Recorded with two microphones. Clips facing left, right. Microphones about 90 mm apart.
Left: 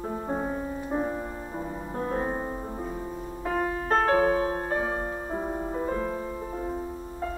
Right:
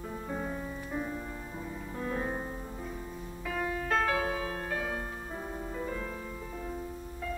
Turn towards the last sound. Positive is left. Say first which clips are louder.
# left 6 dB
turn(degrees=35)  # may be behind; listen again after turning